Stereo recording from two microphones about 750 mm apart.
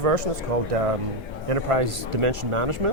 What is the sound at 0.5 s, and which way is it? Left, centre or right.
Speech, right.